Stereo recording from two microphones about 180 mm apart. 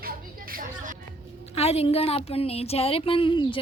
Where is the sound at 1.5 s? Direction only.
35° left (ahead or behind).